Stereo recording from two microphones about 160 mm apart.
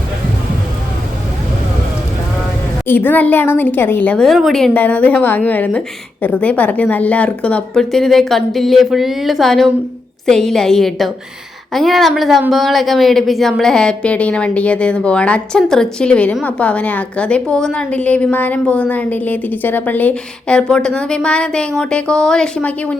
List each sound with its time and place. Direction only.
2.8 s a woman's voice: 10° left (ahead or behind)